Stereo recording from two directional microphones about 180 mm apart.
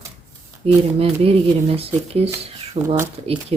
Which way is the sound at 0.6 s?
35° right (ahead or behind).